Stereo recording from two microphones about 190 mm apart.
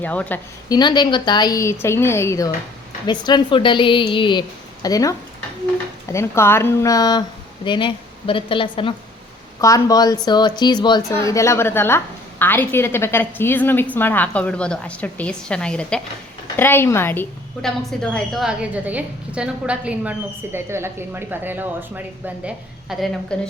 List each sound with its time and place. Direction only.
0.0 s a woman's voice: 10° left (ahead or behind)
0.7 s a woman's voice: 25° left (ahead or behind); by 23.5 s 5° left (ahead or behind)